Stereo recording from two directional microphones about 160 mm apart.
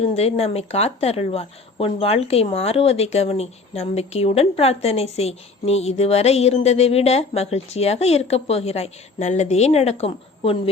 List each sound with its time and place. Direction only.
0.0 s speech: 40° left (ahead or behind)